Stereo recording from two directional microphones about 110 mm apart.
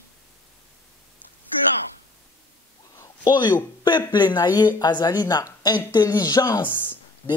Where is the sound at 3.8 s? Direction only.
40° left (ahead or behind).